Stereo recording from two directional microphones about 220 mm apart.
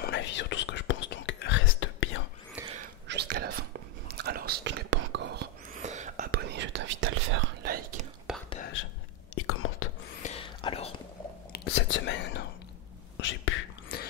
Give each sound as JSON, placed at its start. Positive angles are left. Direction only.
{"t": 0.0, "sound": "whispering", "side_deg": 55}
{"t": 2.6, "sound": "whispering", "side_deg": -10}
{"t": 3.1, "sound": "whispering", "side_deg": -50}
{"t": 6.3, "sound": "whispering", "side_deg": -55}
{"t": 7.6, "sound": "whispering", "side_deg": -40}
{"t": 9.5, "sound": "whispering", "side_deg": 70}
{"t": 10.2, "sound": "whispering", "side_deg": 25}
{"t": 11.5, "sound": "whispering", "side_deg": 55}